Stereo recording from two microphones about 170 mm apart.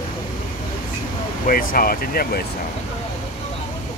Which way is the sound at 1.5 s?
55° left (ahead or behind).